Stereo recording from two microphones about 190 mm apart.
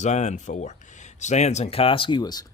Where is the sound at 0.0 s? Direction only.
35° left (ahead or behind).